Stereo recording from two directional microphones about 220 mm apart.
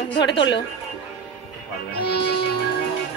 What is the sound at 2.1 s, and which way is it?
Music, 25° left (ahead or behind).